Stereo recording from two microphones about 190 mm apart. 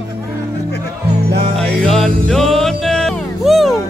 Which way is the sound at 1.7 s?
Centre (ahead or behind).